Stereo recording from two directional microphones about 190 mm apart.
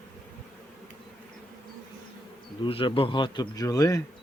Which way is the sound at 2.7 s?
30° left (ahead or behind).